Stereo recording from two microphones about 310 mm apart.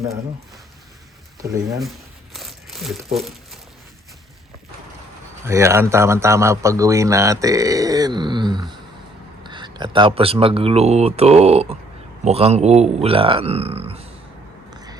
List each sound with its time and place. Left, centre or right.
1.8 s crumpling: centre
5.5 s a man's voice: centre
14.7 s a sound: centre